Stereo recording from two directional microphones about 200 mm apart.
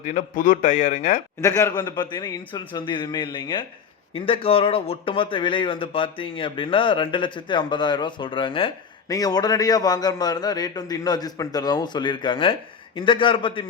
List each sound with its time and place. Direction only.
0.0 s a man's voice: 40° left (ahead or behind)
1.4 s speech: 15° left (ahead or behind)